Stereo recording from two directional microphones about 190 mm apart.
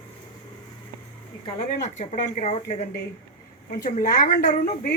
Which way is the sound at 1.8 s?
40° left (ahead or behind).